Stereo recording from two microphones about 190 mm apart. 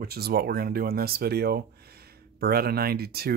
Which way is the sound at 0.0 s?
55° right (ahead or behind).